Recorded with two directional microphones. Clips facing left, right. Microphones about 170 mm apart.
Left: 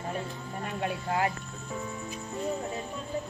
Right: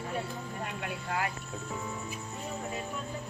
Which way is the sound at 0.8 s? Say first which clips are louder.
Left 6 dB; 35° left (ahead or behind).